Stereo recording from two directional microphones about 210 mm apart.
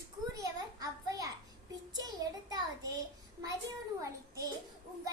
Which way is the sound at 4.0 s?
15° right (ahead or behind).